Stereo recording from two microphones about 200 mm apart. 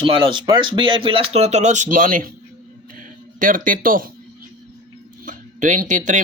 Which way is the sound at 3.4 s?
45° right (ahead or behind).